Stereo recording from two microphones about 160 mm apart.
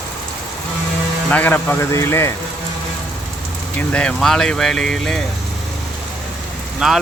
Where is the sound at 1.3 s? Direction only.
10° left (ahead or behind).